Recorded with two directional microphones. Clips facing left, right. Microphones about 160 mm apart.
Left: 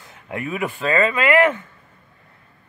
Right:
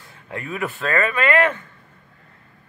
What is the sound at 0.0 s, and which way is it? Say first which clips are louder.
Speech: left 4 dB; 20° left (ahead or behind).